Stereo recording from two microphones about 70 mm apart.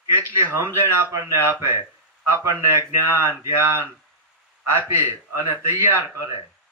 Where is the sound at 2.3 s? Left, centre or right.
Right.